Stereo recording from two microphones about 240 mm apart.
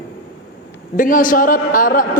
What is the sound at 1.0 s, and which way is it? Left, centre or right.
A man's voice, left.